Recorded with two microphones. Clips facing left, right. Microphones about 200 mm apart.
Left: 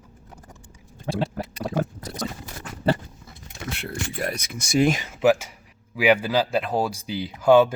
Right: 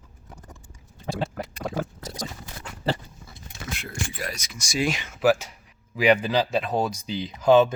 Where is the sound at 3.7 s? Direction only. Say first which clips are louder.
Left 3 dB; 60° left (ahead or behind); by 5.1 s 45° left (ahead or behind).